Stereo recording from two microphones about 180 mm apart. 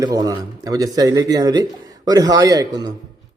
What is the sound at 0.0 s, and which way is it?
A man's voice, 20° right (ahead or behind).